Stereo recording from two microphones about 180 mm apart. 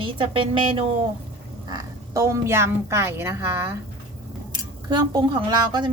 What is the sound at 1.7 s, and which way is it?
A woman's voice, 20° right (ahead or behind).